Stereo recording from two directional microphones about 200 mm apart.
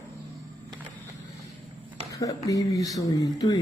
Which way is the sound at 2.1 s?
15° left (ahead or behind).